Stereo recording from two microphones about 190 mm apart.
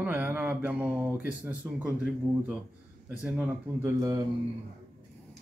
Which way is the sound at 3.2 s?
10° right (ahead or behind).